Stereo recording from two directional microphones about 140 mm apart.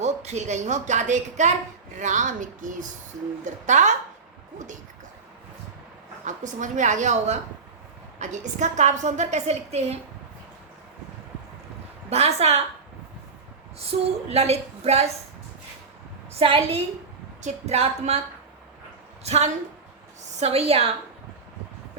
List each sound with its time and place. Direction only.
0.0 s a woman's voice: 55° right (ahead or behind)
6.2 s a woman's voice: 60° right (ahead or behind)
12.1 s a woman's voice: 50° right (ahead or behind)
13.7 s a woman's voice: 45° right (ahead or behind)
16.4 s a woman's voice: 40° right (ahead or behind)
19.2 s a woman's voice: 50° right (ahead or behind)